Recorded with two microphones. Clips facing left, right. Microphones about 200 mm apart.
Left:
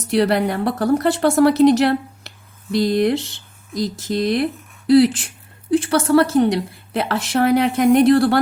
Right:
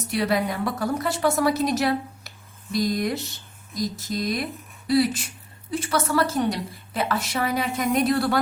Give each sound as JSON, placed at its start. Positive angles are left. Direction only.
{"t": 0.1, "sound": "a woman's voice", "side_deg": 70}